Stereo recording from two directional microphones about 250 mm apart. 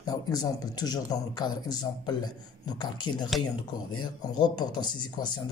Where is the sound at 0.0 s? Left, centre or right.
Centre.